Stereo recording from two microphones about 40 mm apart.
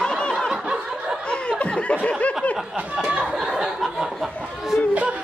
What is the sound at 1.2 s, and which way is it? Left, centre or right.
Laughter, left.